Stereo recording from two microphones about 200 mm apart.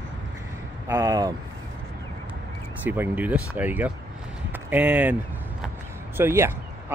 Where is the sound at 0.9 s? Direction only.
20° right (ahead or behind).